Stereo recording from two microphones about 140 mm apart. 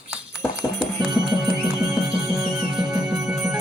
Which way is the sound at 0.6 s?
10° left (ahead or behind).